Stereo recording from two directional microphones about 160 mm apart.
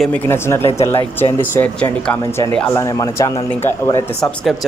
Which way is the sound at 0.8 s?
15° left (ahead or behind).